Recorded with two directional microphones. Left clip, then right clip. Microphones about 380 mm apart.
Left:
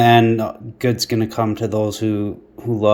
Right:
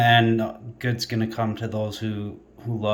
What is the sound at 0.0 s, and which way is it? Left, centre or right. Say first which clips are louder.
Speech: left 5 dB; centre.